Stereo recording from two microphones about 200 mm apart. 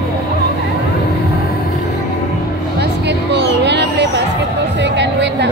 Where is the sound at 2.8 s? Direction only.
60° right (ahead or behind).